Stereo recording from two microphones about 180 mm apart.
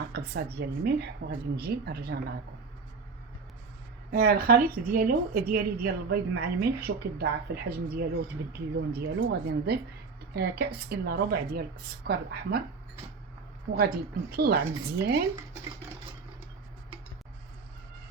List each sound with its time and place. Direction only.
0.1 s a woman's voice: 65° right (ahead or behind)
4.1 s a woman's voice: 55° right (ahead or behind)
13.7 s a woman's voice: 55° right (ahead or behind)